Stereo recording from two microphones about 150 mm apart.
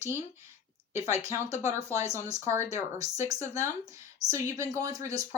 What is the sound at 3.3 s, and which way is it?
Speech, 20° right (ahead or behind).